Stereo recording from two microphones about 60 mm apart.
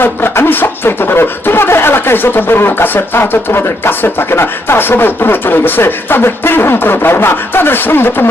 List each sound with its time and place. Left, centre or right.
0.0 s speech: left